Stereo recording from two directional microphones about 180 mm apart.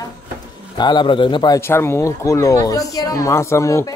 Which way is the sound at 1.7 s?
15° left (ahead or behind).